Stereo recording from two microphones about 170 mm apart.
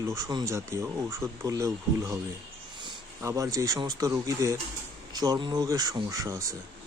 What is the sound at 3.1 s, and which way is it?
Speech, 20° right (ahead or behind).